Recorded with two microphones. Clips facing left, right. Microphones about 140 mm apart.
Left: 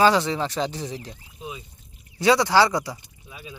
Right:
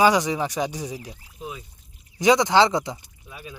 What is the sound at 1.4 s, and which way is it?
Speech, 10° left (ahead or behind).